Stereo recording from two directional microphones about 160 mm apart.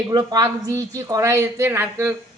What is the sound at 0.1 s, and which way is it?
A woman's voice, 25° right (ahead or behind).